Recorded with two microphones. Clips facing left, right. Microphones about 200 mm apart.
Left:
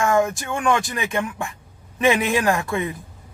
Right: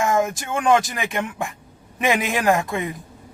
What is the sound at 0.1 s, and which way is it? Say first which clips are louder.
A man's voice: left 1 dB; 20° right (ahead or behind).